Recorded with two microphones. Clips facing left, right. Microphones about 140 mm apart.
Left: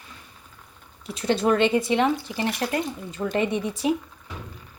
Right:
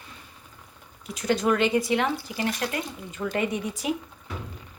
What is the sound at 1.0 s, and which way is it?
Speech, 30° left (ahead or behind).